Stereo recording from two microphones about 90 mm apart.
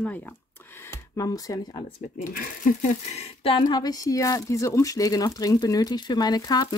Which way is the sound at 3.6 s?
45° left (ahead or behind).